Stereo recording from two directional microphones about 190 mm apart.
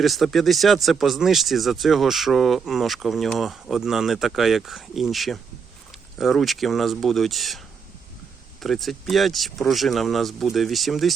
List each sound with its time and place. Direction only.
0.0 s speech: centre (ahead or behind)
8.6 s speech: centre (ahead or behind)